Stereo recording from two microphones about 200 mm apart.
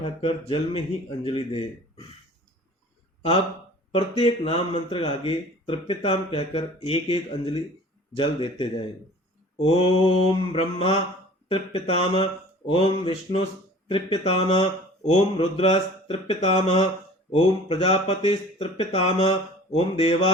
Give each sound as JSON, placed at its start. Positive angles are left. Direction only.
{"t": 0.0, "sound": "speech", "side_deg": 25}
{"t": 3.9, "sound": "speech", "side_deg": 25}
{"t": 9.6, "sound": "speech", "side_deg": 30}